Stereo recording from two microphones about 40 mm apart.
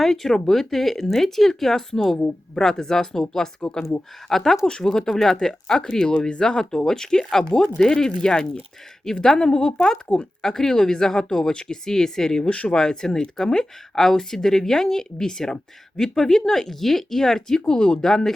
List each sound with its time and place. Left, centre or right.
0.0 s speech: centre
4.6 s speech: centre
12.5 s speech: left; by 17.7 s centre
17.7 s speech: left
18.0 s speech: centre